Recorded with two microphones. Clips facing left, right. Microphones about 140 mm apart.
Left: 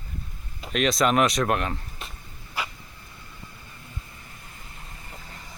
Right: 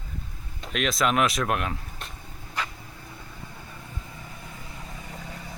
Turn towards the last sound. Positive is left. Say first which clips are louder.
# right 5 dB
turn(degrees=-90)